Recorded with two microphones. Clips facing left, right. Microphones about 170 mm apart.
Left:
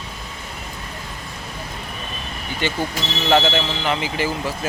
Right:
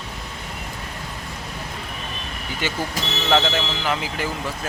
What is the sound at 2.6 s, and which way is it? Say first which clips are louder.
Speech: left 3 dB; 5° right (ahead or behind).